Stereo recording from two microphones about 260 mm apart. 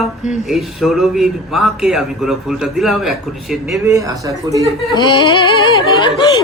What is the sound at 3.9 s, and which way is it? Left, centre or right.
Speech, centre.